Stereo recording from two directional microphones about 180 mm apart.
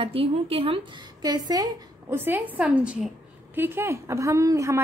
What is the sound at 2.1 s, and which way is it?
A woman's voice, 10° right (ahead or behind).